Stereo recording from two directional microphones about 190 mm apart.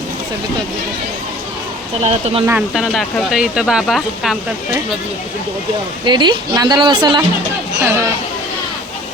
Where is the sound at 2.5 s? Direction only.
5° right (ahead or behind).